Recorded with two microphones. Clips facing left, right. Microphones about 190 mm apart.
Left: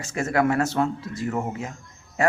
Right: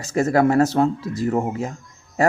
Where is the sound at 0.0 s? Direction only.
35° right (ahead or behind).